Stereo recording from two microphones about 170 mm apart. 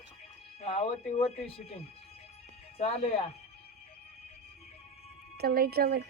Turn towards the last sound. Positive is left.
turn(degrees=-65)  # may be behind; listen again after turning